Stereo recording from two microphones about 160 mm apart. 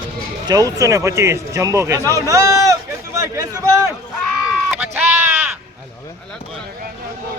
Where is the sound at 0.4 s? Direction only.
20° right (ahead or behind).